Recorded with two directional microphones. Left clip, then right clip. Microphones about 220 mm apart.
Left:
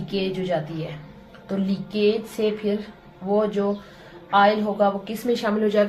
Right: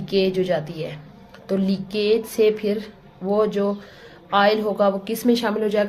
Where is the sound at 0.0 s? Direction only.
55° right (ahead or behind).